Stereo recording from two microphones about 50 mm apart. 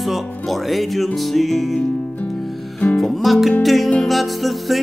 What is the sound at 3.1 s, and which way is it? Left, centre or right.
Music, centre.